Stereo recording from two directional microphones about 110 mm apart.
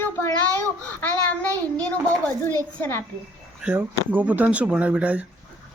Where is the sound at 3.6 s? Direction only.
10° right (ahead or behind).